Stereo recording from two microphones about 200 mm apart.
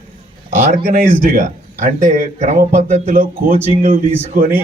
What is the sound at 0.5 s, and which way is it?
Speech, 45° right (ahead or behind).